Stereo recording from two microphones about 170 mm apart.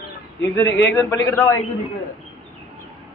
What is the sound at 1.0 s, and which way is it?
Speech, 20° left (ahead or behind).